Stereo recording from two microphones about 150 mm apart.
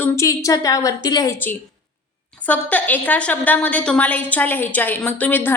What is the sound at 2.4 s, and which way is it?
A woman's voice, 10° left (ahead or behind).